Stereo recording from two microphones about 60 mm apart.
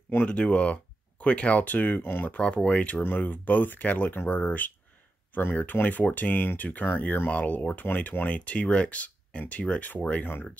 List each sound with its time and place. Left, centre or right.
0.2 s speech: left
2.3 s speech: left